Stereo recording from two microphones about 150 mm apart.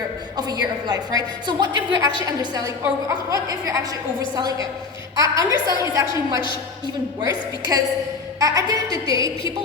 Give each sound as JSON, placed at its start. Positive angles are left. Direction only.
{"t": 0.3, "sound": "a woman's voice", "side_deg": -25}